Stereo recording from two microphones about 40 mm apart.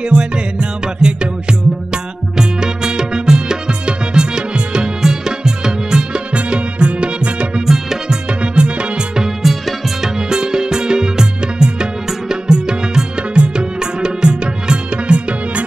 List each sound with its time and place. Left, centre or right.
0.1 s music: right
6.3 s music: right
7.6 s music: centre
8.4 s music: right; by 10.1 s centre
10.3 s music: centre